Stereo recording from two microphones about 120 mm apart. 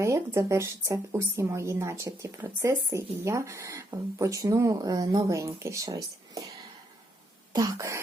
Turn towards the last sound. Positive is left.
turn(degrees=-25)  # may be behind; listen again after turning